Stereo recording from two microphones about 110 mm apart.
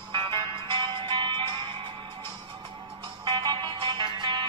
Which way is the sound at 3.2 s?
40° right (ahead or behind).